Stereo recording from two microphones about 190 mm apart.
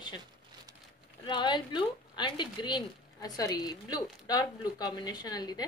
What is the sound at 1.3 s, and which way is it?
A woman's voice, 25° left (ahead or behind).